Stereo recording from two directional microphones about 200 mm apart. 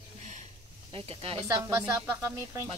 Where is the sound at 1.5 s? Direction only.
15° right (ahead or behind).